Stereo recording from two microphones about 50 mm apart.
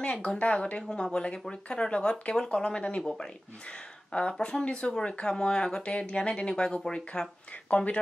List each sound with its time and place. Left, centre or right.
0.0 s speech: left
4.1 s speech: left